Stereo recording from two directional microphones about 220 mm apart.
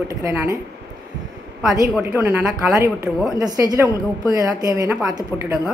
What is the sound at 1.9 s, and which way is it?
A woman's voice, 10° right (ahead or behind).